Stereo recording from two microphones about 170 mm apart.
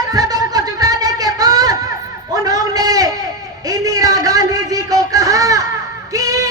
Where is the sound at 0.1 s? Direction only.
20° right (ahead or behind).